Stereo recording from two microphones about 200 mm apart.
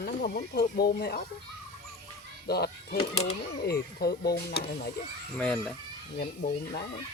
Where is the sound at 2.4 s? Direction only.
55° left (ahead or behind).